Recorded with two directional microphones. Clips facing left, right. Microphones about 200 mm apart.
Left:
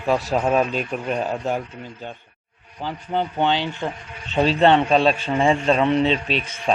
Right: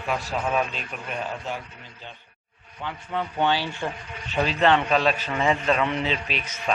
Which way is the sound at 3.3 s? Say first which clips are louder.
Right 1 dB; 20° left (ahead or behind).